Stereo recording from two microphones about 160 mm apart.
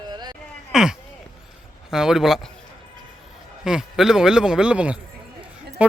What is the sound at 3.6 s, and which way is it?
Speech, 5° right (ahead or behind).